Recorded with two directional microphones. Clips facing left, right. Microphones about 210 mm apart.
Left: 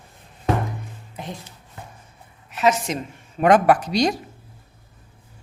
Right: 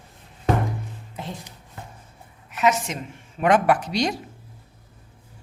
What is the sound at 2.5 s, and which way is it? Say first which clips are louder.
A woman's voice: left 2 dB; 35° left (ahead or behind).